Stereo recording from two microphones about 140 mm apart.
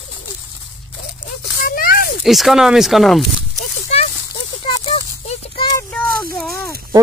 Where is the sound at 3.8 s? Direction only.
55° left (ahead or behind).